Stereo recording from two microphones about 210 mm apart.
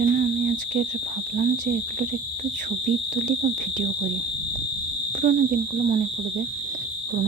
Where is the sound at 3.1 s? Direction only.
40° right (ahead or behind).